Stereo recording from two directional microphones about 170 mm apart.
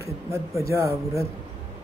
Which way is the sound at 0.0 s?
15° right (ahead or behind).